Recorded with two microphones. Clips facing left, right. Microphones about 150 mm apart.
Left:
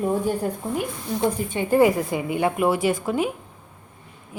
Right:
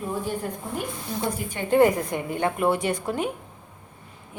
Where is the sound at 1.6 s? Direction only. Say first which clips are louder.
Left 1 dB; 5° left (ahead or behind).